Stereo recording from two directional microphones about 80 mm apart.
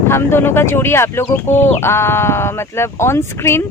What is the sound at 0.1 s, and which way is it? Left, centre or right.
Speech, left.